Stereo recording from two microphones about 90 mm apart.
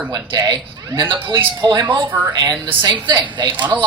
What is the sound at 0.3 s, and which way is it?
Speech, 50° right (ahead or behind).